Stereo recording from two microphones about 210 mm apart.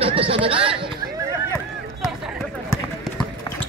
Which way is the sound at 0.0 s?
25° right (ahead or behind).